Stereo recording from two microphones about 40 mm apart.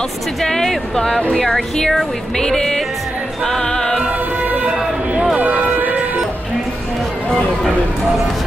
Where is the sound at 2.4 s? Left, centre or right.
Centre.